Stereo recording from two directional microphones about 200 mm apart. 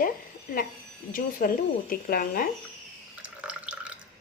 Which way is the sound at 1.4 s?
45° left (ahead or behind).